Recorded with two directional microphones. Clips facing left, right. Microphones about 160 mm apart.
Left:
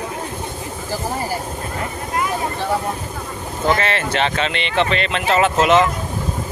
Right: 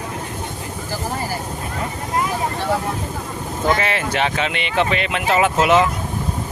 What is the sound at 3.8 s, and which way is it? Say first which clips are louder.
Speech: left 1 dB; 10° right (ahead or behind).